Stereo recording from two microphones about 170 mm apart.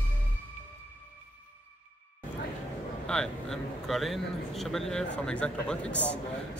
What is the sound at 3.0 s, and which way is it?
A man's voice, 5° left (ahead or behind).